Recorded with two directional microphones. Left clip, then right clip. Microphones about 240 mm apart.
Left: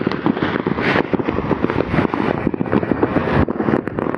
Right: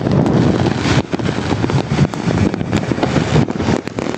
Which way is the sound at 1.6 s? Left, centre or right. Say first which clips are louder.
Even; right.